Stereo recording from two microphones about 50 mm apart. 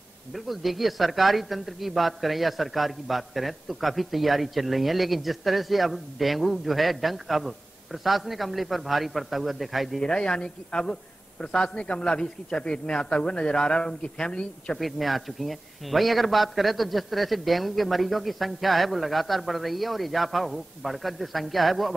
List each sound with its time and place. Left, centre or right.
0.3 s a man's voice: centre
9.9 s a man's voice: centre
14.8 s a man's voice: centre